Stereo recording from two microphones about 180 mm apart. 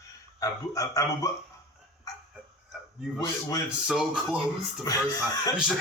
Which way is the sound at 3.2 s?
20° left (ahead or behind).